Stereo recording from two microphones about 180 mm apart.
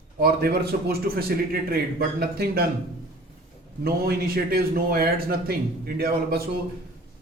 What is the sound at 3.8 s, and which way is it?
Speech, 60° right (ahead or behind).